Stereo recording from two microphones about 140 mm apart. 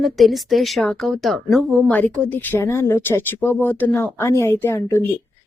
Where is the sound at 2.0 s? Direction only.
10° left (ahead or behind).